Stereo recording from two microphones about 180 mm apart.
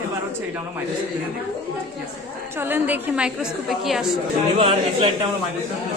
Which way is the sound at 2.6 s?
10° right (ahead or behind).